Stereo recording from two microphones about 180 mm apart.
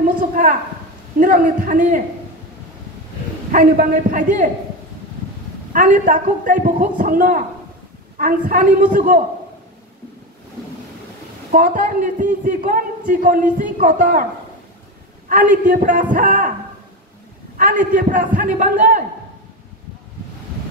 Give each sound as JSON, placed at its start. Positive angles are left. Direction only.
{"t": 0.4, "sound": "a sound", "side_deg": -50}
{"t": 1.2, "sound": "a man's voice", "side_deg": -50}
{"t": 3.5, "sound": "a man's voice", "side_deg": -50}
{"t": 5.7, "sound": "a man's voice", "side_deg": -50}
{"t": 11.5, "sound": "a man's voice", "side_deg": -50}
{"t": 15.2, "sound": "a man's voice", "side_deg": -50}
{"t": 17.6, "sound": "a man's voice", "side_deg": -50}